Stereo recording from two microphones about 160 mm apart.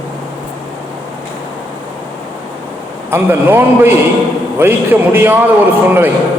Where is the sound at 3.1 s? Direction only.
15° right (ahead or behind).